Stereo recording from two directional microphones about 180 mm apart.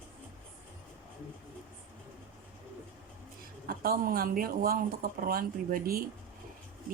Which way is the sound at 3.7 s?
55° right (ahead or behind).